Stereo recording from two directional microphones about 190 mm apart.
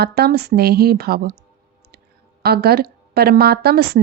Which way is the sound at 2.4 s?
55° right (ahead or behind).